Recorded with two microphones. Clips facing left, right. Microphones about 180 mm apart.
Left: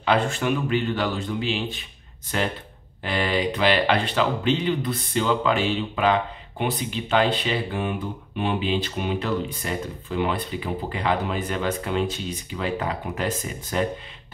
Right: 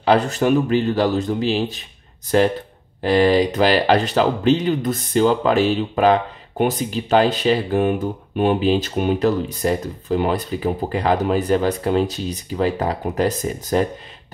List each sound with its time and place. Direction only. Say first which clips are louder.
0.0 s speech: right 6 dB; 40° right (ahead or behind)
3.0 s speech: right 9 dB; 40° right (ahead or behind)